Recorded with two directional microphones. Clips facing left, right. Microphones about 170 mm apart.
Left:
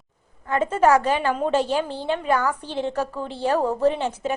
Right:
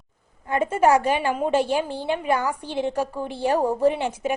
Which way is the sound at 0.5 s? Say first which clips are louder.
Left 1 dB; 10° right (ahead or behind).